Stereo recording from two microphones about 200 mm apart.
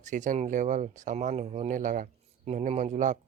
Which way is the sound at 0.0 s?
40° right (ahead or behind).